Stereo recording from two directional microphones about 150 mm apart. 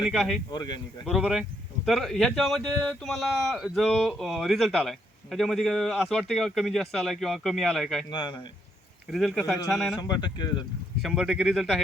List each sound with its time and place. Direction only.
0.0 s speech: centre (ahead or behind)
0.5 s speech: 30° left (ahead or behind)
1.0 s speech: centre (ahead or behind)
8.1 s a man's voice: 30° left (ahead or behind)
9.0 s speech: centre (ahead or behind)
10.0 s speech: 30° left (ahead or behind)
11.0 s speech: centre (ahead or behind)